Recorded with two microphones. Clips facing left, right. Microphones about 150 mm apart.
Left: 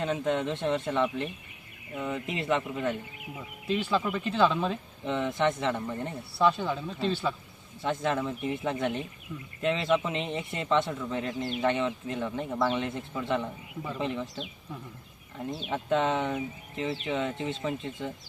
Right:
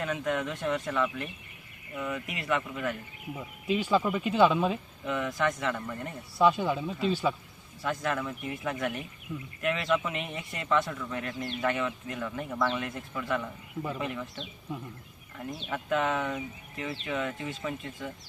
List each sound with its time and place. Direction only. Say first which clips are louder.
0.0 s speech: left 2 dB; 25° left (ahead or behind)
3.7 s speech: right 2 dB; 10° right (ahead or behind)
5.0 s speech: left 2 dB; 25° left (ahead or behind)
6.4 s speech: right 1 dB; 10° right (ahead or behind)
7.8 s speech: left 2 dB; 25° left (ahead or behind)
15.7 s speech: left 2 dB; 25° left (ahead or behind)